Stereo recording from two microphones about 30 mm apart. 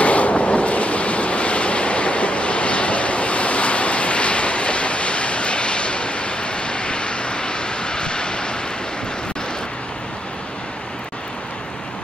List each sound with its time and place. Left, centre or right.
0.0 s waves: left